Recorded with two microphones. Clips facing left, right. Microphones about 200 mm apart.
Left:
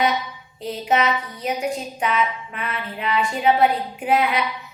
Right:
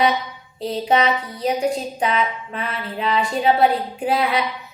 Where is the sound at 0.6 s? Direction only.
30° right (ahead or behind).